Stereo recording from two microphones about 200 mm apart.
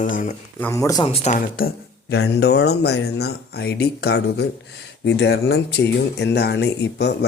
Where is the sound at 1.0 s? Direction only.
30° left (ahead or behind).